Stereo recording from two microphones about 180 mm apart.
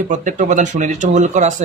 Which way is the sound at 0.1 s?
45° right (ahead or behind).